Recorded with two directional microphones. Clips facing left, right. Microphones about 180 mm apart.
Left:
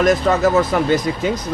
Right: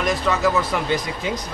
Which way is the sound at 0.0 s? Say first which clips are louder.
Left 6 dB; 45° left (ahead or behind).